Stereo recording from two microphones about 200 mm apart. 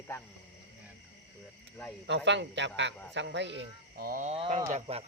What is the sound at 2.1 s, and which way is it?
Speech, 60° right (ahead or behind).